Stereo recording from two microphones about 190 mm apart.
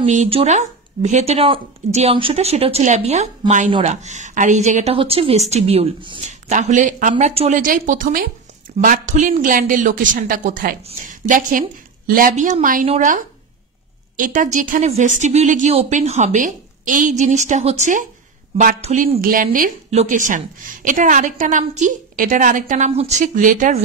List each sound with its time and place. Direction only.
0.0 s speech: 35° right (ahead or behind)
6.2 s a woman's voice: 40° right (ahead or behind)